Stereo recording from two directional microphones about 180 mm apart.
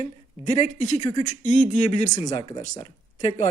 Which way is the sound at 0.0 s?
40° left (ahead or behind).